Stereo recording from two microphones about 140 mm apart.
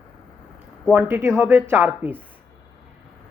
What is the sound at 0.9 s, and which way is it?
Speech, 15° right (ahead or behind).